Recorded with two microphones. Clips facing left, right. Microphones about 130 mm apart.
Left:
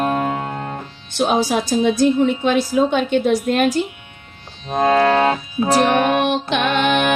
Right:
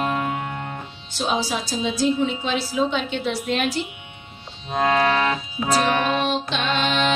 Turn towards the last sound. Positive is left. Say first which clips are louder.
# left 5 dB
turn(degrees=55)  # may be behind; listen again after turning